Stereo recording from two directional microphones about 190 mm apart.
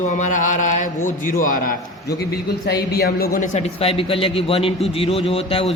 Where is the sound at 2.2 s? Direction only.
60° left (ahead or behind).